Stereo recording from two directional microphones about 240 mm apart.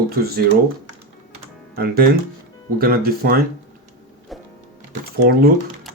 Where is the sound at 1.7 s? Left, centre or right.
Right.